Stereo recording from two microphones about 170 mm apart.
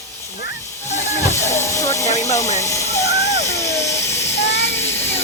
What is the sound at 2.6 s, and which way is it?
Speech, 15° left (ahead or behind).